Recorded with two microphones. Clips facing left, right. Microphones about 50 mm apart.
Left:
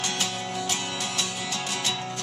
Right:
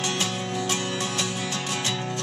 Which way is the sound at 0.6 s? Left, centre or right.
Right.